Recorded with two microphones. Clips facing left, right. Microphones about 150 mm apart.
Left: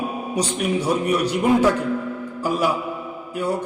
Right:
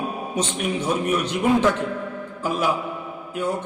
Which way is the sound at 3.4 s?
10° left (ahead or behind).